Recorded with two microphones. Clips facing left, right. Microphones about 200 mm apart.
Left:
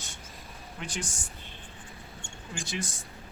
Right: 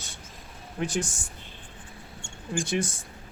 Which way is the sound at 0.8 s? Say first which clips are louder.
Right 10 dB; 45° right (ahead or behind).